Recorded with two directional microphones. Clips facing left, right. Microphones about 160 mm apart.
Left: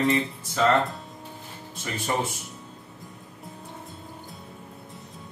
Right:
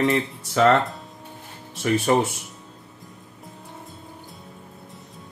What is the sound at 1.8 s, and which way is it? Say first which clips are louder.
Speech: right 8 dB; 75° right (ahead or behind).